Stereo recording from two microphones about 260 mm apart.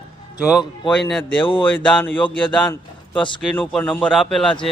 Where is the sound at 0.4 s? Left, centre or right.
Centre.